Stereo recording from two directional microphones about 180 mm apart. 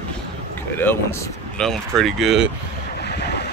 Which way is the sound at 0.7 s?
15° left (ahead or behind).